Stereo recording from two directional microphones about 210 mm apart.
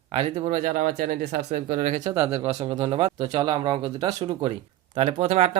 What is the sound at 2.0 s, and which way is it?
Speech, 30° right (ahead or behind).